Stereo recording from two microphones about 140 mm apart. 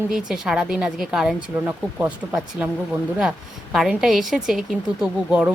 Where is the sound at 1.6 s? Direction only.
15° right (ahead or behind).